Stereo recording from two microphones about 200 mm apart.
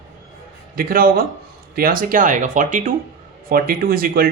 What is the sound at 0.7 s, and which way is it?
Speech, 45° right (ahead or behind).